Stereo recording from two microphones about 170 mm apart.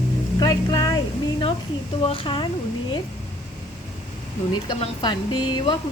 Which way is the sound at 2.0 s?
30° left (ahead or behind).